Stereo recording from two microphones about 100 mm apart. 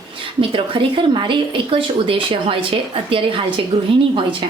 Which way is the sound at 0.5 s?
60° right (ahead or behind).